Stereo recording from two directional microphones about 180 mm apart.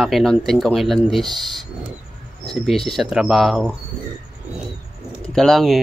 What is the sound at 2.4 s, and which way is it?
Speech, centre (ahead or behind).